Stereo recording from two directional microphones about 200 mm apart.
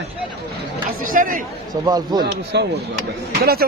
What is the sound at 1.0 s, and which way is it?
Speech, 45° right (ahead or behind).